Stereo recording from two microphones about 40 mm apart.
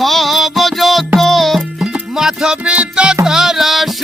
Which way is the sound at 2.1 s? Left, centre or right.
Centre.